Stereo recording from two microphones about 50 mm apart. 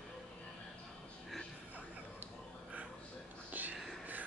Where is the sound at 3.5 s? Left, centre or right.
Right.